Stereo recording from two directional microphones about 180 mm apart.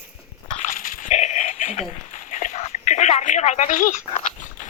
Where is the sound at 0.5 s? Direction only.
40° left (ahead or behind).